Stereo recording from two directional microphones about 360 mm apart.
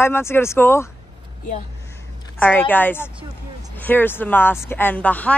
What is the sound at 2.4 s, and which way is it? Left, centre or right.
Speech, centre.